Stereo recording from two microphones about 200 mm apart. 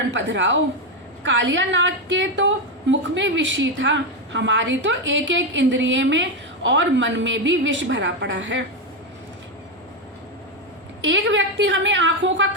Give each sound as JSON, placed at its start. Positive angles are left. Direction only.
{"t": 0.1, "sound": "a woman's voice", "side_deg": -65}
{"t": 11.0, "sound": "a woman's voice", "side_deg": -65}